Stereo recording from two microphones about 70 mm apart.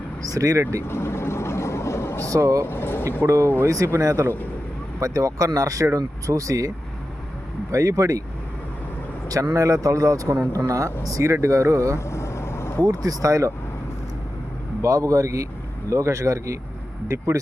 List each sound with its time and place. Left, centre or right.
0.2 s speech: right
0.9 s vehicle: left
2.2 s speech: right
2.6 s speech: left
3.2 s speech: right
4.9 s speech: right
7.7 s speech: right
9.3 s speech: right
11.9 s vehicle: left
12.8 s speech: right
14.8 s speech: right